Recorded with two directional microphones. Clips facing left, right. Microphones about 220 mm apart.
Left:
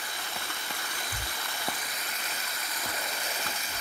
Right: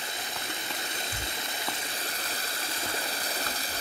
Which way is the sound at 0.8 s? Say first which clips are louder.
Right 3 dB; 25° right (ahead or behind).